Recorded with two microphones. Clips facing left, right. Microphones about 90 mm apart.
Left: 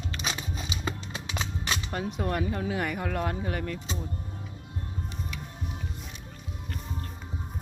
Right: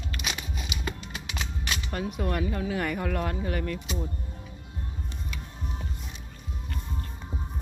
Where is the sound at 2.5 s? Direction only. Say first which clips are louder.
Right 1 dB; 25° left (ahead or behind).